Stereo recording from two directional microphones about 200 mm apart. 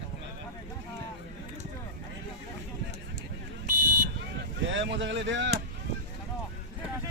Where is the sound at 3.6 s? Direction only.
40° right (ahead or behind).